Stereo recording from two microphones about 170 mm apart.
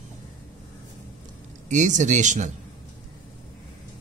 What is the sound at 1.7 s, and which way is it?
Speech, 45° right (ahead or behind).